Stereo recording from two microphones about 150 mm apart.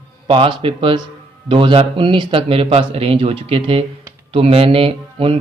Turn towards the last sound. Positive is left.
turn(degrees=-40)  # may be behind; listen again after turning